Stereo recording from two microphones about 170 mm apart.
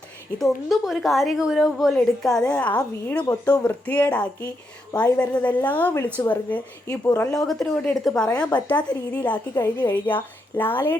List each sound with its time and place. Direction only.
0.3 s a woman's voice: centre (ahead or behind); by 7.3 s 15° left (ahead or behind)
7.3 s a woman's voice: centre (ahead or behind)
9.7 s a woman's voice: 25° left (ahead or behind)
10.1 s a woman's voice: 10° left (ahead or behind)